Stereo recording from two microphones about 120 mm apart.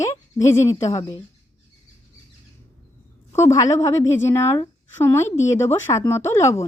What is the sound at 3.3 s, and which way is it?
Speech, 25° left (ahead or behind).